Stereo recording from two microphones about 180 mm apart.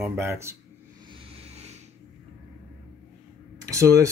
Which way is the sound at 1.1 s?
35° right (ahead or behind).